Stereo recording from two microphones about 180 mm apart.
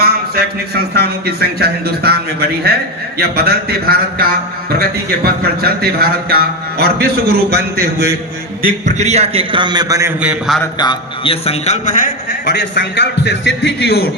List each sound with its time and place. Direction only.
0.0 s a man's voice: 60° right (ahead or behind)
8.6 s a man's voice: 40° right (ahead or behind); by 10.6 s 5° right (ahead or behind)
10.6 s a man's voice: 25° left (ahead or behind); by 14.0 s 70° left (ahead or behind)